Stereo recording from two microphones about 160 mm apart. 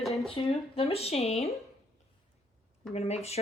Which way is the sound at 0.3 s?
35° left (ahead or behind).